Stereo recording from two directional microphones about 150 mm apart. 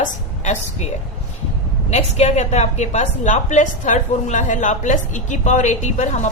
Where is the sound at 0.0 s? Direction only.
55° left (ahead or behind).